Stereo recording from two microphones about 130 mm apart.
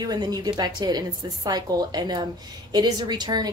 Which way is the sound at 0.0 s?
30° right (ahead or behind).